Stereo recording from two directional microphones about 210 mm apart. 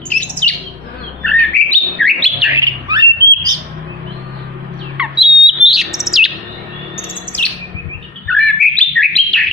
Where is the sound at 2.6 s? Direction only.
20° right (ahead or behind).